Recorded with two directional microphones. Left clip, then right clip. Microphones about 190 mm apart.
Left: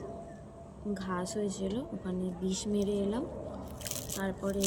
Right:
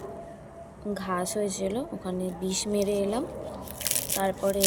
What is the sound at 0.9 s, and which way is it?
A woman's voice, 10° left (ahead or behind).